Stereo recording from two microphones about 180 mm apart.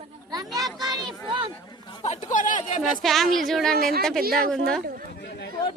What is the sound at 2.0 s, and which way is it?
Speech, 40° left (ahead or behind).